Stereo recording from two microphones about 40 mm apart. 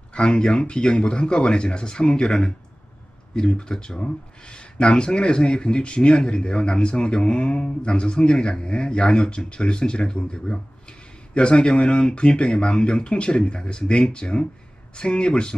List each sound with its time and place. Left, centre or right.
0.1 s speech: left